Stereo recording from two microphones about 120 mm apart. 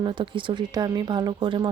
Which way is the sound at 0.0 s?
40° right (ahead or behind).